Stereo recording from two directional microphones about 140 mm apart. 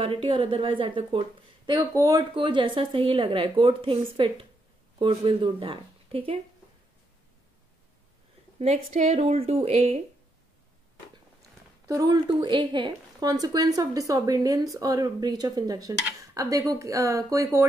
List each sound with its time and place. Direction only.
0.0 s a woman's voice: 40° right (ahead or behind)
1.7 s a woman's voice: 25° right (ahead or behind)
2.3 s a woman's voice: 35° right (ahead or behind)
8.5 s speech: 50° right (ahead or behind)
11.9 s a woman's voice: 25° right (ahead or behind)